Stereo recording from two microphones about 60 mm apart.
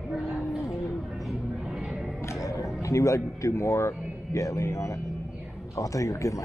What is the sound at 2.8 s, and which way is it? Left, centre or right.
A man's voice, left.